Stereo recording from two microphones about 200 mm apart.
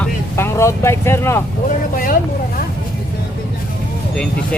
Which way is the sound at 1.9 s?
45° left (ahead or behind).